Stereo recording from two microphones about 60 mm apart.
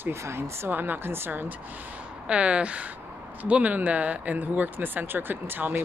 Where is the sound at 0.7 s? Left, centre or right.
Right.